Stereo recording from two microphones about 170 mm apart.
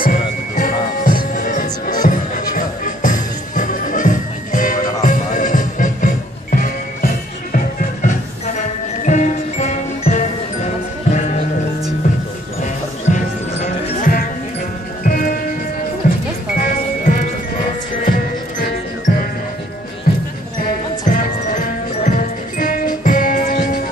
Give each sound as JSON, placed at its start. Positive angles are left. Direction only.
{"t": 0.0, "sound": "music", "side_deg": 50}
{"t": 13.1, "sound": "music", "side_deg": 50}
{"t": 20.1, "sound": "basketball bounce", "side_deg": 60}
{"t": 21.0, "sound": "music", "side_deg": 50}